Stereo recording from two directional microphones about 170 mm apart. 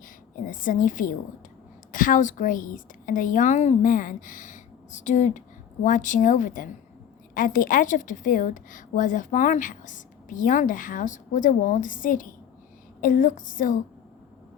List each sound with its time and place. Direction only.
0.3 s a woman's voice: 50° left (ahead or behind)